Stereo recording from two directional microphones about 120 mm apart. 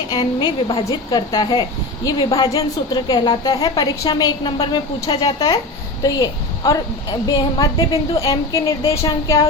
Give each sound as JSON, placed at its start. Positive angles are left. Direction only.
{"t": 0.1, "sound": "a woman's voice", "side_deg": 35}